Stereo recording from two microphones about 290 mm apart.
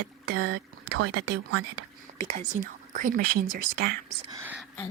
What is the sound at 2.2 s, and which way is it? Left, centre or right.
Speech, right.